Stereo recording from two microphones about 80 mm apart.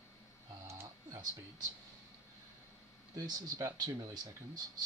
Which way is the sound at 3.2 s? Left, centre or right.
Right.